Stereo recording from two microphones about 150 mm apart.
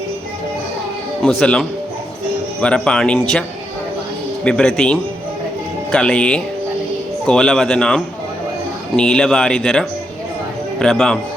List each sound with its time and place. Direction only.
1.2 s speech: centre (ahead or behind)
4.4 s speech: 5° left (ahead or behind)